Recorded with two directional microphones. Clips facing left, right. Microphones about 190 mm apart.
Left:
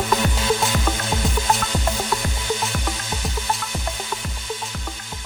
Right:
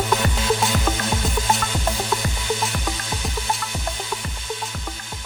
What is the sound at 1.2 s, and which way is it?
Music, centre (ahead or behind).